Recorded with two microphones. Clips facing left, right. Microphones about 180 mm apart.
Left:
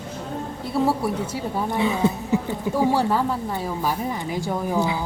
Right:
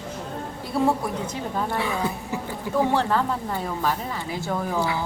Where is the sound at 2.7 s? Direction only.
10° left (ahead or behind).